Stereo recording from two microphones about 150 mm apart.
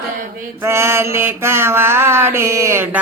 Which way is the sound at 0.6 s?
15° right (ahead or behind).